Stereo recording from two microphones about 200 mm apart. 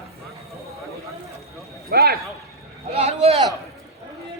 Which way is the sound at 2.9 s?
30° right (ahead or behind).